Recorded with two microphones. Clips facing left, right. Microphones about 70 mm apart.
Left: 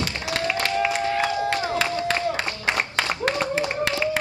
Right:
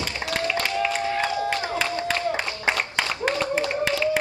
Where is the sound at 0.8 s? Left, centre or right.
Centre.